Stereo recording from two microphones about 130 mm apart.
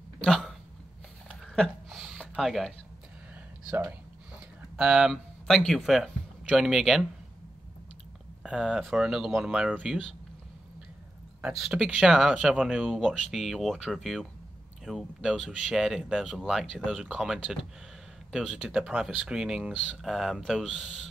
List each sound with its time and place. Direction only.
0.2 s a sound: centre (ahead or behind)
3.6 s speech: 15° right (ahead or behind)
4.7 s speech: 5° right (ahead or behind)
8.5 s speech: 5° right (ahead or behind)
11.4 s speech: 5° right (ahead or behind)